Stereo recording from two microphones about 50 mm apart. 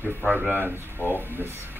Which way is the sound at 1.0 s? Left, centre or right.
Left.